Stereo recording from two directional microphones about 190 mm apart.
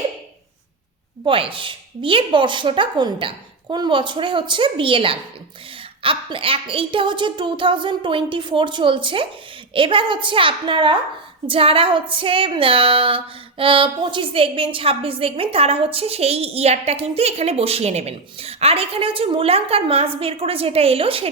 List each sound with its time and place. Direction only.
1.2 s a woman's voice: 25° right (ahead or behind)